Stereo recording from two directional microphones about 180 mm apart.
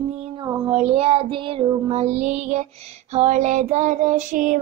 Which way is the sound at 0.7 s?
35° right (ahead or behind).